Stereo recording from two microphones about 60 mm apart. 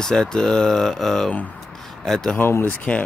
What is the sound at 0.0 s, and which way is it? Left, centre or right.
Speech, centre.